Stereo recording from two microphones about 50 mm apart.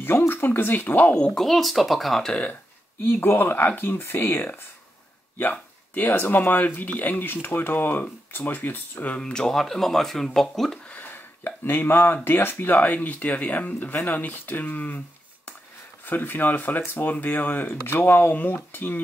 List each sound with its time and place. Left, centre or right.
0.3 s speech: left
1.3 s speech: centre
3.1 s speech: left
5.4 s speech: left
9.2 s speech: centre
11.4 s speech: left
16.1 s speech: left